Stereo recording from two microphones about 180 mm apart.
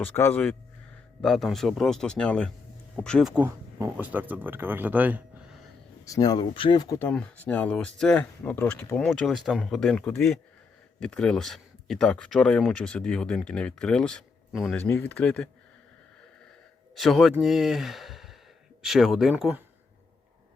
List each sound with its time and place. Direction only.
0.0 s speech: 10° left (ahead or behind)
3.4 s speech: 15° right (ahead or behind)
6.1 s speech: 20° left (ahead or behind)
7.1 s speech: 5° left (ahead or behind)
16.9 s speech: centre (ahead or behind)